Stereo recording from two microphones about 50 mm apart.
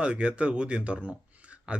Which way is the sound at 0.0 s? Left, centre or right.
Right.